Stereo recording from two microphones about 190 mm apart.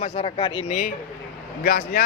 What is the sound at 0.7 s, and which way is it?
Speech, 40° left (ahead or behind).